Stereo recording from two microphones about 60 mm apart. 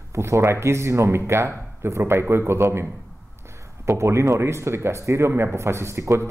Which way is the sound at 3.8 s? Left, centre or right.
Right.